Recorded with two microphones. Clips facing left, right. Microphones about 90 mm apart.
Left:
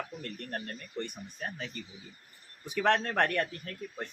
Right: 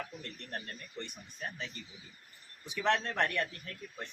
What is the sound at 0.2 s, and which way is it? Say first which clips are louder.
Speech: left 5 dB; 50° left (ahead or behind).